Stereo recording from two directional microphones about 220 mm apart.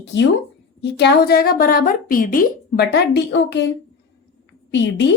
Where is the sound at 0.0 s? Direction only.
55° left (ahead or behind).